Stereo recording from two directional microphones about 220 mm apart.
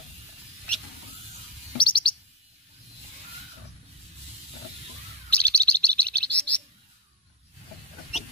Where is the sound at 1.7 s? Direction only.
20° left (ahead or behind).